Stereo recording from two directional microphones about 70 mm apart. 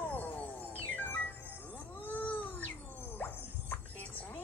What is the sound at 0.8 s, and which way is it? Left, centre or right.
Music, left.